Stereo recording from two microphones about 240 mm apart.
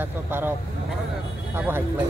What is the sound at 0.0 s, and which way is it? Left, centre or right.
Speech, centre.